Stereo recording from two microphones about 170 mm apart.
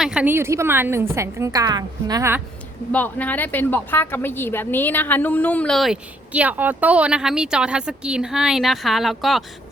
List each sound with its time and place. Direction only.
0.0 s a woman's voice: 5° right (ahead or behind)
2.9 s speech: 10° left (ahead or behind)